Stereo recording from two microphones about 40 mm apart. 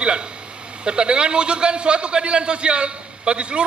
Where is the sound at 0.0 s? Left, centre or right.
Right.